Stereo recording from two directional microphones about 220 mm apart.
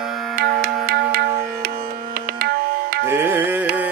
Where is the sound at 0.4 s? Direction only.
45° right (ahead or behind).